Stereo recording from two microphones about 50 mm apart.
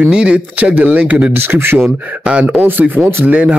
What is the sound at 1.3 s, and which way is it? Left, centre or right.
Speech, right.